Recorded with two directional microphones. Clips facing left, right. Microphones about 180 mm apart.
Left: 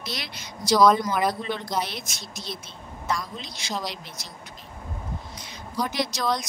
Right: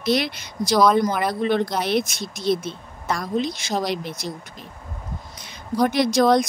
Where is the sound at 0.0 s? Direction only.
60° right (ahead or behind).